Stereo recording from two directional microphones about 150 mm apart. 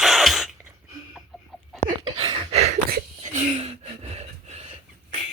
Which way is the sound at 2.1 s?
40° right (ahead or behind).